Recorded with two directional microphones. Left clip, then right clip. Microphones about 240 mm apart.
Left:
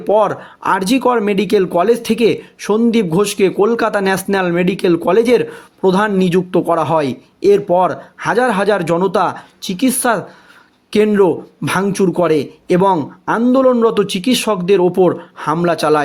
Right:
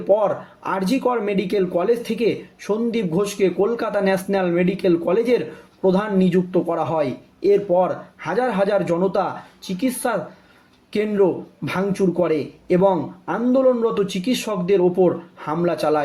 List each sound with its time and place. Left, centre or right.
0.1 s speech: left